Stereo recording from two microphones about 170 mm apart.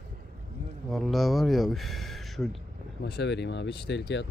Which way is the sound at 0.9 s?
Centre (ahead or behind).